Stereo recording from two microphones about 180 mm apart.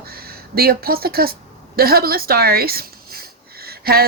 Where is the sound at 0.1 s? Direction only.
55° right (ahead or behind).